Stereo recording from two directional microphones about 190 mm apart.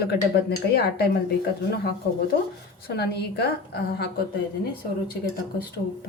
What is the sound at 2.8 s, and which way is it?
A woman's voice, 55° left (ahead or behind).